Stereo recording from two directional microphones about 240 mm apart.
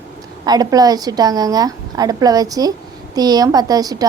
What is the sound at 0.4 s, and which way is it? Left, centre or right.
A woman's voice, centre.